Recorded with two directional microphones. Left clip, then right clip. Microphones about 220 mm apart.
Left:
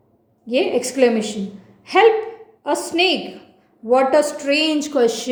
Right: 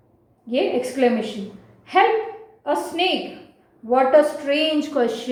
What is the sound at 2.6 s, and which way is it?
A woman's voice, 45° left (ahead or behind).